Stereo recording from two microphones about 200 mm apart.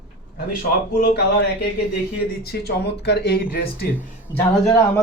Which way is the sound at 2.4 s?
55° left (ahead or behind).